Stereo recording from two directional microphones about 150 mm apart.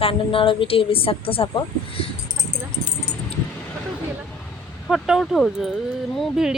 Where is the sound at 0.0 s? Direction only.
35° left (ahead or behind).